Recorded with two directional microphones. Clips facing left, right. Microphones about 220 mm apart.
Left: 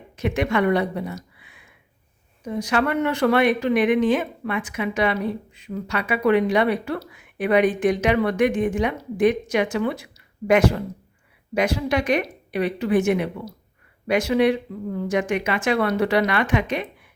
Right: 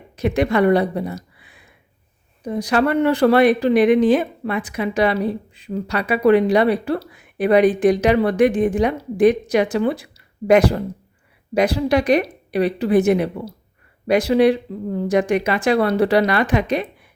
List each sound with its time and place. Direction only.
0.2 s speech: 35° right (ahead or behind)